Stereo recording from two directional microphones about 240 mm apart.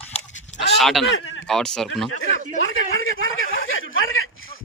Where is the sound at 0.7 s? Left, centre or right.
Centre.